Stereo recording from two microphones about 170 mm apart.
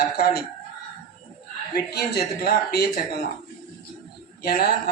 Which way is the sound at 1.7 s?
75° left (ahead or behind).